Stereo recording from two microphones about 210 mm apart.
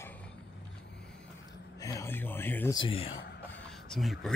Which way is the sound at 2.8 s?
25° left (ahead or behind).